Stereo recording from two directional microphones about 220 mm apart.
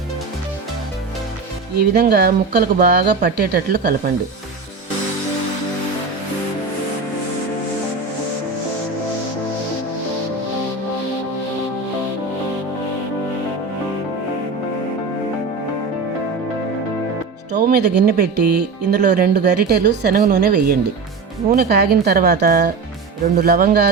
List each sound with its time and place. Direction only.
1.8 s speech: 45° right (ahead or behind)
17.6 s speech: 45° right (ahead or behind)